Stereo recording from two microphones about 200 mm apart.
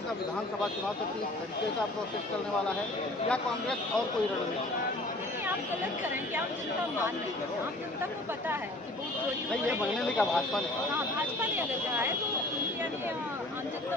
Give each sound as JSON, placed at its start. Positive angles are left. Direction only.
{"t": 3.2, "sound": "a man's voice", "side_deg": 5}
{"t": 10.2, "sound": "a man's voice", "side_deg": 0}
{"t": 11.3, "sound": "speech", "side_deg": -10}